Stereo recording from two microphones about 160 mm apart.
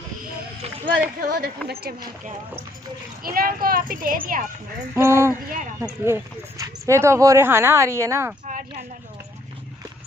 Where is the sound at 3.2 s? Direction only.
65° right (ahead or behind).